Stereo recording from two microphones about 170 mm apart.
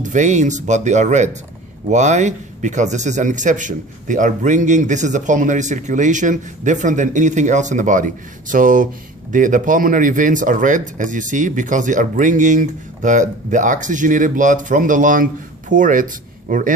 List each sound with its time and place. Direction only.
0.0 s a man's voice: 45° right (ahead or behind)